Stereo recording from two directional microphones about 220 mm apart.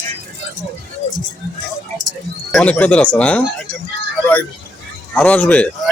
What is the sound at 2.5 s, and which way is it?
Speech, 5° left (ahead or behind).